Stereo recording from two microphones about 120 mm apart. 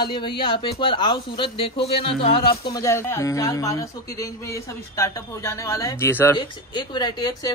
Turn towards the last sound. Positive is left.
turn(degrees=40)  # may be behind; listen again after turning